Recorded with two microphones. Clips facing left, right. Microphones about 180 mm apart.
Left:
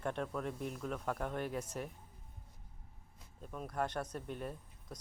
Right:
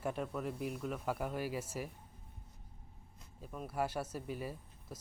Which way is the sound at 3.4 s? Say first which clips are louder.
Right 1 dB; 5° right (ahead or behind).